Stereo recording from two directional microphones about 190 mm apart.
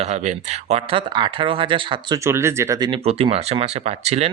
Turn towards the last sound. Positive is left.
turn(degrees=-35)  # may be behind; listen again after turning